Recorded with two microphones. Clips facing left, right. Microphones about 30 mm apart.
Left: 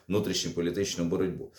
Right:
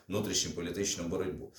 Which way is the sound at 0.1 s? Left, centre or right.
Left.